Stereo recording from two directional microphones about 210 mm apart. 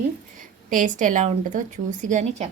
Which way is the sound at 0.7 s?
40° right (ahead or behind).